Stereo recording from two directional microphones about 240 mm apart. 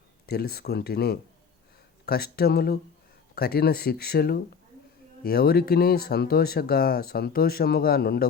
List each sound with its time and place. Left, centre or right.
0.3 s speech: left